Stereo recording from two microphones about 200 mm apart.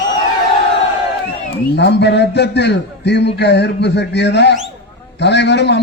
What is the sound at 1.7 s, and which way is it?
A man's voice, 60° left (ahead or behind).